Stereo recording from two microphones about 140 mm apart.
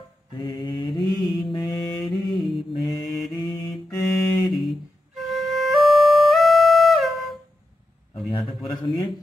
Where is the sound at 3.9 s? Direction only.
25° left (ahead or behind).